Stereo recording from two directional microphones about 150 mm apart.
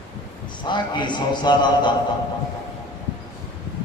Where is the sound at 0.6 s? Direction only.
30° left (ahead or behind).